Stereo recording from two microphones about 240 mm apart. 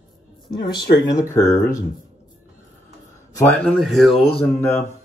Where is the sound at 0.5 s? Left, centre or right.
Left.